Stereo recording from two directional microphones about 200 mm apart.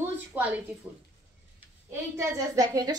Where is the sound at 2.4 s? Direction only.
20° right (ahead or behind).